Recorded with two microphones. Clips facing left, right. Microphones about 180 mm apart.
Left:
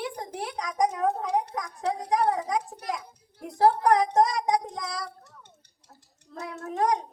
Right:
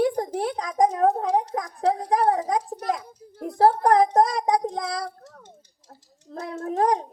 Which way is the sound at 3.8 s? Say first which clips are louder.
Right 3 dB; 35° right (ahead or behind).